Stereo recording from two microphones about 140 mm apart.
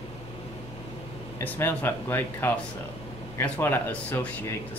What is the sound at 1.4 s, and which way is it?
Speech, 15° left (ahead or behind).